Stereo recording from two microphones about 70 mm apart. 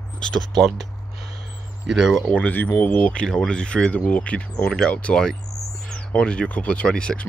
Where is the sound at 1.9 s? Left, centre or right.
Centre.